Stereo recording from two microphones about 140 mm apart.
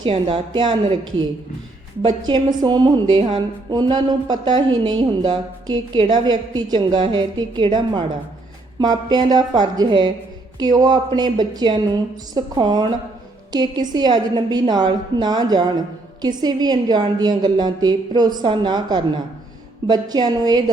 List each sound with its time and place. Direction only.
0.0 s a woman's voice: 35° right (ahead or behind)
2.0 s a woman's voice: 35° right (ahead or behind)